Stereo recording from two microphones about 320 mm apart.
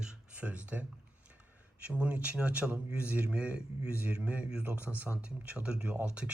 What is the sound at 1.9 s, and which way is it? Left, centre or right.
Speech, centre.